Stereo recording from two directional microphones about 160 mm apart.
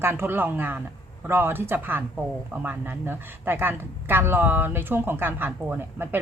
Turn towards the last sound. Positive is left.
turn(degrees=-10)  # may be behind; listen again after turning